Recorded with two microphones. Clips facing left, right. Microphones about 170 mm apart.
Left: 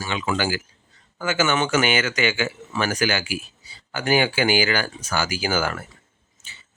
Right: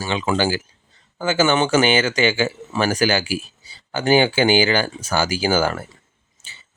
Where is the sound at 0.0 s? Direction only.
30° right (ahead or behind).